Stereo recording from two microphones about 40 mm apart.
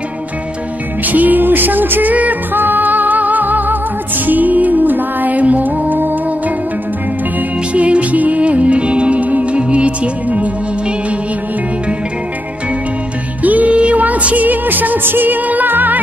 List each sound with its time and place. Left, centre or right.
1.0 s music: right
2.5 s music: right
7.7 s music: right
13.4 s music: right